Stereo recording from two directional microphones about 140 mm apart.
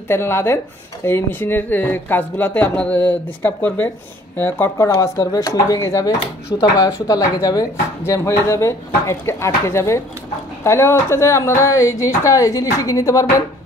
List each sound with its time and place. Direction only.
0.1 s speech: 15° left (ahead or behind)